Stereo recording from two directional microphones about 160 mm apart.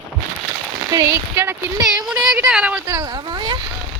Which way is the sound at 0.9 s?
20° right (ahead or behind).